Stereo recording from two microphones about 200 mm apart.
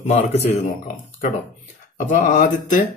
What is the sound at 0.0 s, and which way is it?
Speech, 35° left (ahead or behind).